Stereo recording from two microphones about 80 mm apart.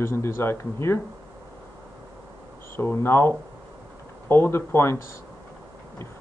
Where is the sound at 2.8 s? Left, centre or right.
Left.